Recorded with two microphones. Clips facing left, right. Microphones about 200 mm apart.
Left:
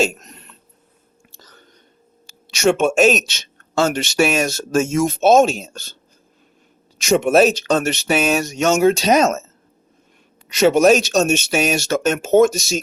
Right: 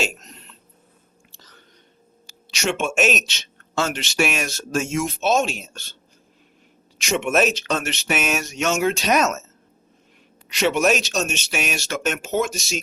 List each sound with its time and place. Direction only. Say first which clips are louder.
2.6 s speech: left 8 dB; 45° left (ahead or behind)
7.0 s speech: left 7 dB; 40° left (ahead or behind)
10.5 s speech: left 7 dB; 40° left (ahead or behind)